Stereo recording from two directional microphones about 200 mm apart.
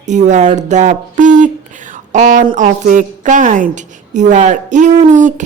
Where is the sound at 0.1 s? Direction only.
35° right (ahead or behind).